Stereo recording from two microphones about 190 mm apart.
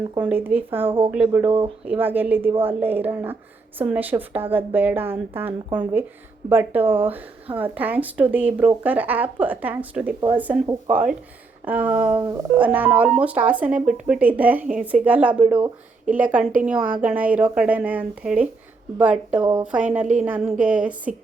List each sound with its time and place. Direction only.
0.3 s speech: 10° right (ahead or behind)
1.5 s speech: 30° right (ahead or behind)
1.8 s speech: 10° right (ahead or behind)
11.6 s a woman's voice: 10° right (ahead or behind)
19.4 s speech: 20° right (ahead or behind)
19.7 s speech: 10° right (ahead or behind)